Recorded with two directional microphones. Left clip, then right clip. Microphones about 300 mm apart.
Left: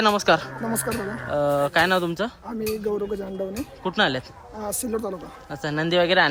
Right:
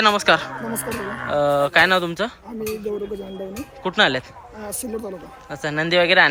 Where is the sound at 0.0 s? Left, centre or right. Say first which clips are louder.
Right 3 dB; centre.